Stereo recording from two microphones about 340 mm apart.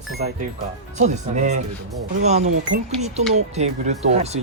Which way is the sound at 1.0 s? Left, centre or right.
Right.